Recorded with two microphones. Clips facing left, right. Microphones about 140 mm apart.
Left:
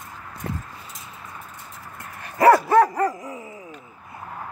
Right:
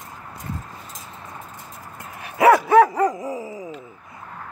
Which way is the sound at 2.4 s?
Centre (ahead or behind).